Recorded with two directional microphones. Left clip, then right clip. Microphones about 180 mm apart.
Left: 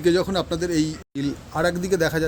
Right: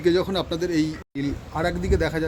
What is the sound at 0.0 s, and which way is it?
A man's voice, 40° left (ahead or behind).